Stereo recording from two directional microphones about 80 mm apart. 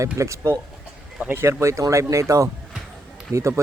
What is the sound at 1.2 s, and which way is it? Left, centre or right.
Speech, right.